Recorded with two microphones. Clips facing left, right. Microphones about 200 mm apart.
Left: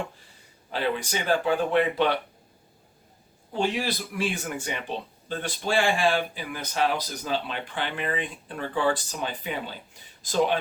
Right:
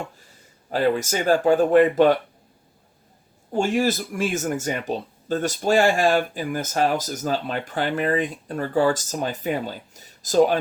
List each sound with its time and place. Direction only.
0.7 s speech: 45° right (ahead or behind)
3.5 s speech: 45° right (ahead or behind)